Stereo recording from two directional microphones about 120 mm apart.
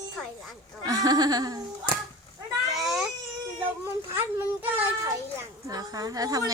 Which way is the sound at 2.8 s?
5° right (ahead or behind).